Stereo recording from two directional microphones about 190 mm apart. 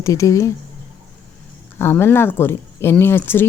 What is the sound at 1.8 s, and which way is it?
Speech, 10° left (ahead or behind).